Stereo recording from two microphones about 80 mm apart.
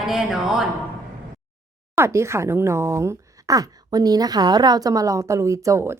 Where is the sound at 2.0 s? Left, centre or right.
Right.